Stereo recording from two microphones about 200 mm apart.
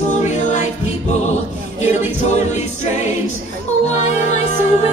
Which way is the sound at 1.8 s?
35° left (ahead or behind).